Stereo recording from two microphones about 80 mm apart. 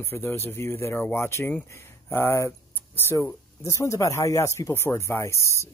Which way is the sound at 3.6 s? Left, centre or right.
Left.